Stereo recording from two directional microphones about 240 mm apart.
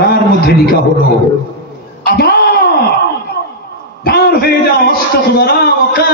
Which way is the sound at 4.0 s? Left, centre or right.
Left.